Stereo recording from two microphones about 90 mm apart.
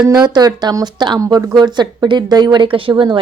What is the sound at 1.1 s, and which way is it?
A woman's voice, 40° right (ahead or behind).